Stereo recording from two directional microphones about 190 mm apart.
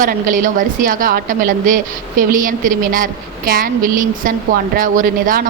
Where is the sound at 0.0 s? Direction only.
45° right (ahead or behind).